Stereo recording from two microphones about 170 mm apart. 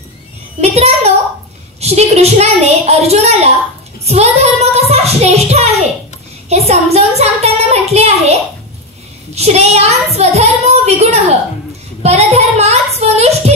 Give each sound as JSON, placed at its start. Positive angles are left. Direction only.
{"t": 0.6, "sound": "a child's voice", "side_deg": -40}
{"t": 12.0, "sound": "child singing", "side_deg": -40}